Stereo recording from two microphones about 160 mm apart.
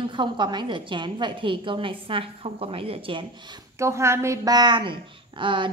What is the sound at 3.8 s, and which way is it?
A woman's voice, 15° right (ahead or behind).